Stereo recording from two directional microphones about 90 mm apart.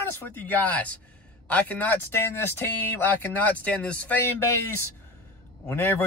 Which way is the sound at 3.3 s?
15° left (ahead or behind).